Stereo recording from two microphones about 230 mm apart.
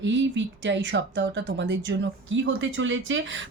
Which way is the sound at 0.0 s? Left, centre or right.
Right.